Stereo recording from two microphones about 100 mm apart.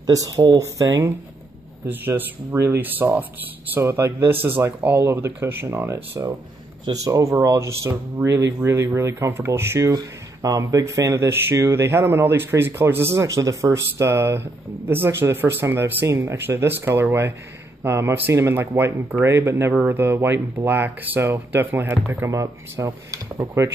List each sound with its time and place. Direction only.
0.0 s speech: 40° right (ahead or behind)
1.9 s speech: 20° right (ahead or behind)